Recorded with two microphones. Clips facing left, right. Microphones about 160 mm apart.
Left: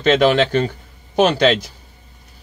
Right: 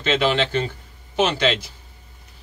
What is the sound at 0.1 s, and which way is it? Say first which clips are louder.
Speech: left 6 dB; 50° left (ahead or behind).